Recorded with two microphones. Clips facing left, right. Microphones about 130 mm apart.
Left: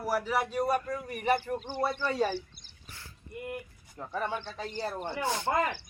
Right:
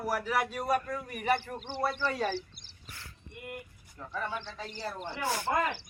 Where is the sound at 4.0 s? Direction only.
35° left (ahead or behind).